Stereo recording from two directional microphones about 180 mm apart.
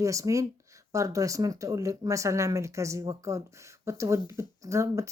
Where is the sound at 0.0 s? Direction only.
20° right (ahead or behind).